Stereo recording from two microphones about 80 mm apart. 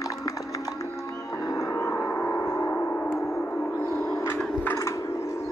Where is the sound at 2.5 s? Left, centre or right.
Left.